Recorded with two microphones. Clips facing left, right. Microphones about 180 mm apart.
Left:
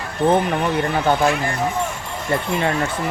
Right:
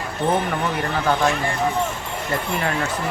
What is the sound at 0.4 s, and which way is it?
Speech, 20° left (ahead or behind).